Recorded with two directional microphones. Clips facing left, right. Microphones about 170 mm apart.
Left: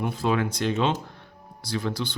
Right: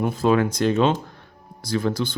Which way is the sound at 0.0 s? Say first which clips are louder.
Right 6 dB; 45° right (ahead or behind).